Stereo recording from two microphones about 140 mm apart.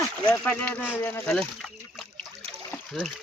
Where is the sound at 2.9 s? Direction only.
Centre (ahead or behind).